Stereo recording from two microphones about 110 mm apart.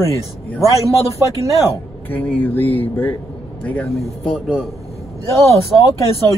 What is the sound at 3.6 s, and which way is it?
Speech, 10° left (ahead or behind).